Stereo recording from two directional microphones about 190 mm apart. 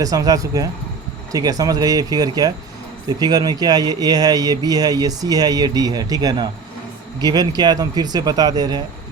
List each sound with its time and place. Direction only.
0.0 s speech: 20° right (ahead or behind)